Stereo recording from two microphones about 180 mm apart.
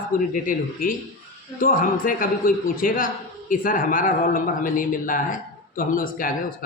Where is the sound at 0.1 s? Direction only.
50° left (ahead or behind).